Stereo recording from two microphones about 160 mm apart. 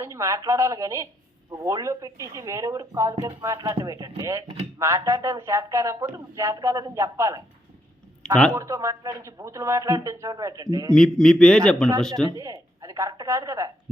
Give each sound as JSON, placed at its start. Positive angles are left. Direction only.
{"t": 0.0, "sound": "speech", "side_deg": -20}
{"t": 8.2, "sound": "speech", "side_deg": 5}
{"t": 8.5, "sound": "speech", "side_deg": -20}
{"t": 10.9, "sound": "a man's voice", "side_deg": 5}
{"t": 12.4, "sound": "speech", "side_deg": -20}